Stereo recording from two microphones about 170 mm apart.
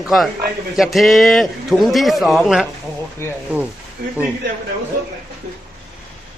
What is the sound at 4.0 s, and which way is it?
Speech, 65° right (ahead or behind).